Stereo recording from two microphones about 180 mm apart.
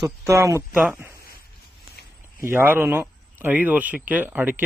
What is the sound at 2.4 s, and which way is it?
Speech, 10° right (ahead or behind).